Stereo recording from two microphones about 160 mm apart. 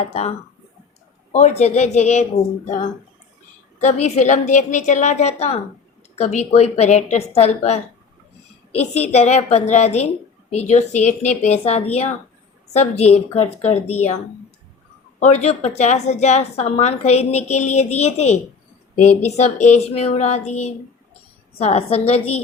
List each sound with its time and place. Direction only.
0.0 s a woman's voice: 40° left (ahead or behind)
15.2 s a woman's voice: 45° left (ahead or behind)